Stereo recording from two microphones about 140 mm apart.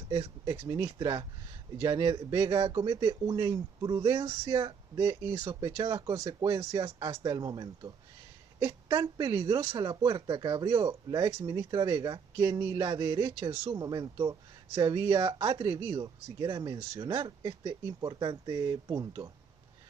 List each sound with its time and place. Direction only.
0.1 s speech: 30° right (ahead or behind)